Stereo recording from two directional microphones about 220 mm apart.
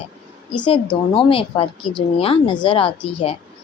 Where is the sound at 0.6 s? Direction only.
25° left (ahead or behind).